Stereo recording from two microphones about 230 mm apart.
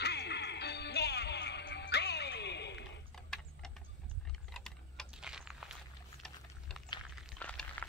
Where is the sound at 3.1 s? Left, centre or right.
Centre.